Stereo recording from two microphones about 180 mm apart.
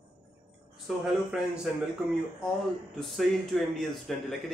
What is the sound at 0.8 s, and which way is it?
Speech, 5° right (ahead or behind).